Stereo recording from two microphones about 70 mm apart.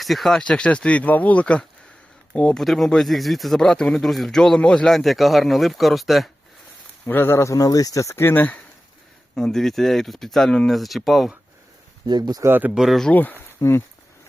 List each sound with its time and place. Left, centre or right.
0.0 s speech: centre
0.4 s speech: centre
2.6 s speech: centre
7.0 s speech: left
7.5 s speech: left
8.1 s speech: left
9.3 s speech: centre
12.0 s speech: right
12.5 s speech: right
12.7 s speech: centre
13.6 s speech: left